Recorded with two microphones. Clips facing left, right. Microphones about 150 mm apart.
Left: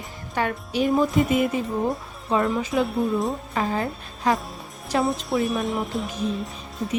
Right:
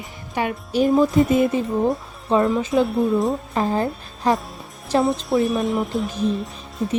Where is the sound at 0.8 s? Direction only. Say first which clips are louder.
Right 4 dB; centre (ahead or behind).